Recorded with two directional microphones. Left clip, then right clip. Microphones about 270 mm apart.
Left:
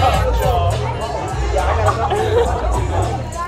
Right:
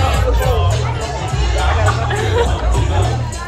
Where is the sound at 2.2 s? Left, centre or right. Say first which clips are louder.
Even; left.